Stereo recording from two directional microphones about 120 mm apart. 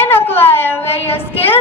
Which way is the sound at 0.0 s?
20° left (ahead or behind).